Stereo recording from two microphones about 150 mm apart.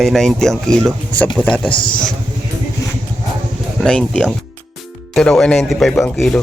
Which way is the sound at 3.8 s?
5° left (ahead or behind).